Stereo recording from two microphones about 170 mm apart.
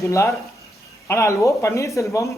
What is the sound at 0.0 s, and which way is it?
A man's voice, 15° left (ahead or behind).